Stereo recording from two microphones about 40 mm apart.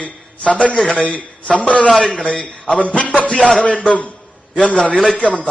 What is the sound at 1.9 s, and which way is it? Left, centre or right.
Speech, centre.